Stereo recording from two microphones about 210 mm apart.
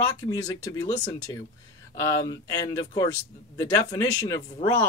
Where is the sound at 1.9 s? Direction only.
15° left (ahead or behind).